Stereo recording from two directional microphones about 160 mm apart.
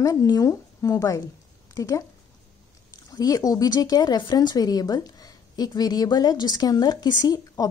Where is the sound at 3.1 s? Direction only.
25° left (ahead or behind).